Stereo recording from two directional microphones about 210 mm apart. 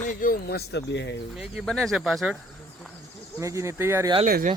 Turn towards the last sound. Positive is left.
turn(degrees=-40)  # may be behind; listen again after turning